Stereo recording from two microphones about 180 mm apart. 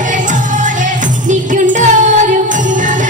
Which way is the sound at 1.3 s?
45° right (ahead or behind).